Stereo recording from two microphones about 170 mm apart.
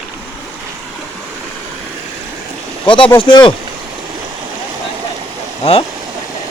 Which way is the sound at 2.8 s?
30° left (ahead or behind).